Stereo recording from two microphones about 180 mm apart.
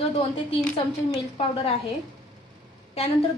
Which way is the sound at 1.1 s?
30° left (ahead or behind).